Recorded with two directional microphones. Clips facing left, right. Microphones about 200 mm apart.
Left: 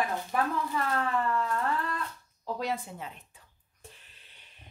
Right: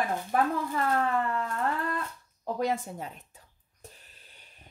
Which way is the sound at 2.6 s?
45° right (ahead or behind).